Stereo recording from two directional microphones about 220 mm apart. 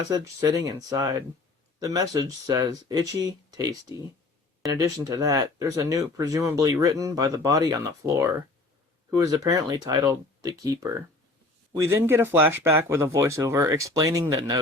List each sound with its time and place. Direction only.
0.1 s speech: 15° right (ahead or behind)